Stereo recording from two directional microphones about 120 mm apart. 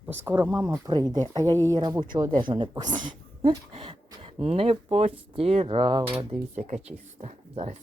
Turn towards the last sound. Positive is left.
turn(degrees=-70)  # may be behind; listen again after turning